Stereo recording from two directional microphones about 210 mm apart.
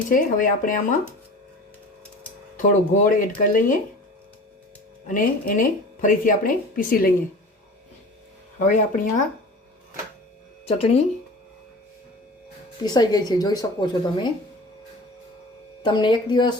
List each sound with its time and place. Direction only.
0.1 s a woman's voice: 40° left (ahead or behind)
2.6 s a woman's voice: 35° left (ahead or behind)
5.0 s a woman's voice: 40° left (ahead or behind)
8.5 s a woman's voice: 35° left (ahead or behind)
10.7 s speech: 30° left (ahead or behind)
12.8 s speech: 20° left (ahead or behind)
15.8 s speech: 20° left (ahead or behind)